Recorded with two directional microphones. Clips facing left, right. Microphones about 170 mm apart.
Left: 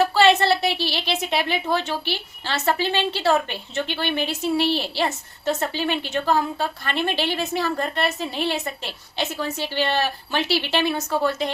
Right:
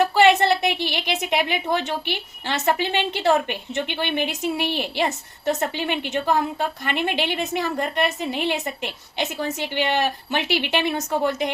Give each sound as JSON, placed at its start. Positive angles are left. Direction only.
{"t": 0.0, "sound": "a woman's voice", "side_deg": -15}